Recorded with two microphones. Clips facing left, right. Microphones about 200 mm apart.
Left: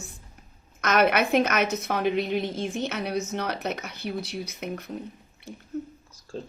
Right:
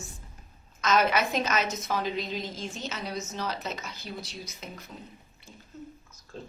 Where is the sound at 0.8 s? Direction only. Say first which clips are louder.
Left 3 dB; 65° left (ahead or behind).